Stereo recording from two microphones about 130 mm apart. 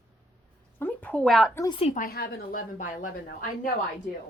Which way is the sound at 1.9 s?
90° left.